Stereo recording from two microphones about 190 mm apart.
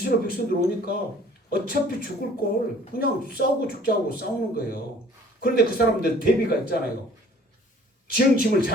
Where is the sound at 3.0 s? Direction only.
55° left (ahead or behind).